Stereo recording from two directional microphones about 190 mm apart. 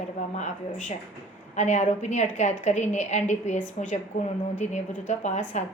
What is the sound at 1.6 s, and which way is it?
A woman's voice, 40° left (ahead or behind).